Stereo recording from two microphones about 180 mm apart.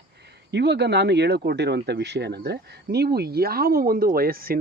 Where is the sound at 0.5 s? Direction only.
70° right (ahead or behind).